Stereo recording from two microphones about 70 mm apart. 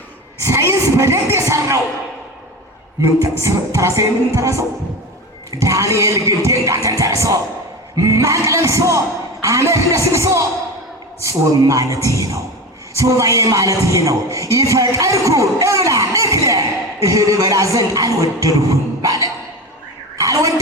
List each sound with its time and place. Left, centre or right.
0.4 s speech: right
3.0 s speech: right
20.1 s a sound: right